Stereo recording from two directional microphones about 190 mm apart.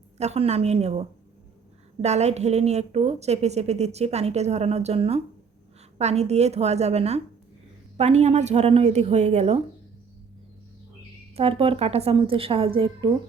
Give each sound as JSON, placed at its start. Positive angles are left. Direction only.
{"t": 0.2, "sound": "a woman's voice", "side_deg": -35}
{"t": 11.3, "sound": "a woman's voice", "side_deg": -30}